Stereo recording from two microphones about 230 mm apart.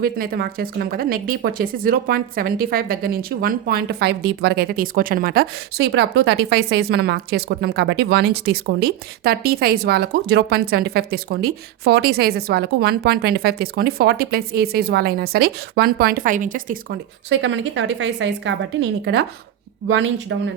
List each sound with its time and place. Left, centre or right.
0.0 s speech: right
17.2 s speech: right
19.9 s speech: right